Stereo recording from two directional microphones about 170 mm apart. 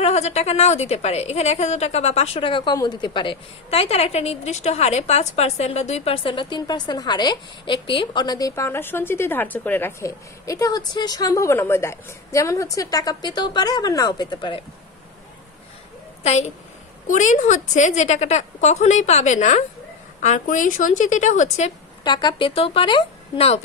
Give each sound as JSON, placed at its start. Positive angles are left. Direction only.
{"t": 0.0, "sound": "a woman's voice", "side_deg": 40}
{"t": 16.2, "sound": "a woman's voice", "side_deg": 40}
{"t": 22.0, "sound": "a woman's voice", "side_deg": 25}